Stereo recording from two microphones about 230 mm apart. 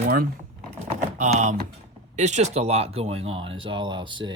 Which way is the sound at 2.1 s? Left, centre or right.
Right.